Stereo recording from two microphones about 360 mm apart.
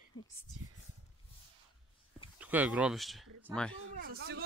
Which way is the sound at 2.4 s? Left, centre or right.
Centre.